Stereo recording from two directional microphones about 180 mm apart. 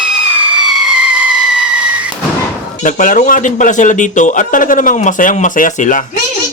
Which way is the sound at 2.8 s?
45° left (ahead or behind).